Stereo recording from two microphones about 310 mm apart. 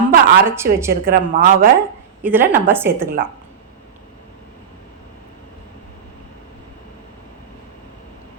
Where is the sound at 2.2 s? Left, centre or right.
Centre.